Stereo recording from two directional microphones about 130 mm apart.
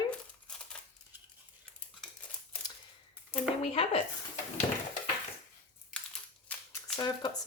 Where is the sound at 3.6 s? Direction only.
45° left (ahead or behind).